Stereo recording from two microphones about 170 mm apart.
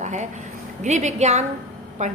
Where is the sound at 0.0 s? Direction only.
45° right (ahead or behind).